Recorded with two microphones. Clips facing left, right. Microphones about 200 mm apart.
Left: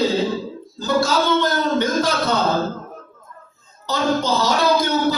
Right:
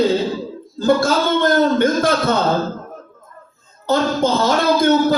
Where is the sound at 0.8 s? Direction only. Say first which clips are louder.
Right 4 dB; 55° right (ahead or behind).